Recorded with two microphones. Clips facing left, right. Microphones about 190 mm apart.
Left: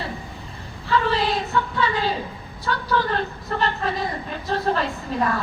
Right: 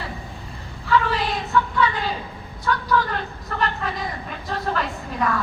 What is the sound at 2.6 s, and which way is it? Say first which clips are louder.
A woman's voice: right 1 dB; 30° left (ahead or behind).